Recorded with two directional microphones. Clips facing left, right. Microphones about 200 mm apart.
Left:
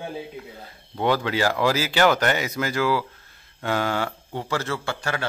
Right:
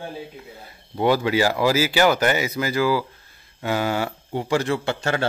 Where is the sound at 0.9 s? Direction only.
10° right (ahead or behind).